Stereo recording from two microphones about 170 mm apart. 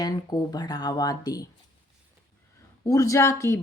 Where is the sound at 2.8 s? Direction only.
20° left (ahead or behind).